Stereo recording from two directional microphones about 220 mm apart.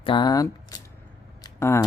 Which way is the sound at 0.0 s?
20° left (ahead or behind).